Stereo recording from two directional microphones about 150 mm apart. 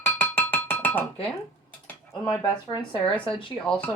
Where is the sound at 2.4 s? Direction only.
30° left (ahead or behind).